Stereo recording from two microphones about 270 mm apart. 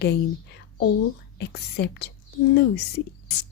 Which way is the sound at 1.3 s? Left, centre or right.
Left.